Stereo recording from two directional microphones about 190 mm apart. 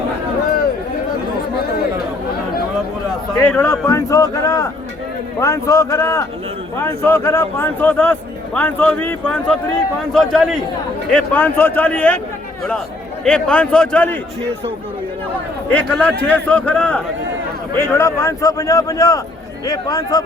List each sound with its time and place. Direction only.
3.4 s a man's voice: 10° left (ahead or behind)
13.2 s a man's voice: 5° left (ahead or behind)
15.7 s speech: 5° left (ahead or behind)